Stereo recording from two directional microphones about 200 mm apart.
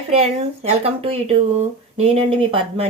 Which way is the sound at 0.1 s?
30° right (ahead or behind).